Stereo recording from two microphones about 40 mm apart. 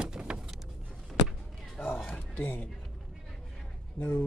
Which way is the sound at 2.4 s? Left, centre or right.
Left.